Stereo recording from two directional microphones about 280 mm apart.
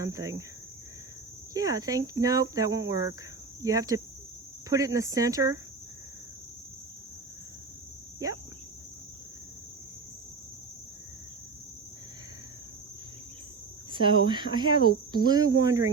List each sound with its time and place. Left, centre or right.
0.0 s speech: centre
1.5 s speech: centre
13.9 s speech: centre